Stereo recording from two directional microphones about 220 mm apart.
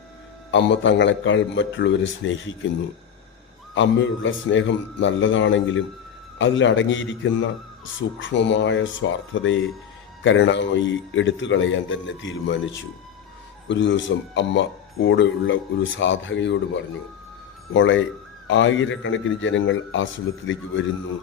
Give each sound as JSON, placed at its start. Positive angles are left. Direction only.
{"t": 0.5, "sound": "speech", "side_deg": 55}
{"t": 3.8, "sound": "speech", "side_deg": 60}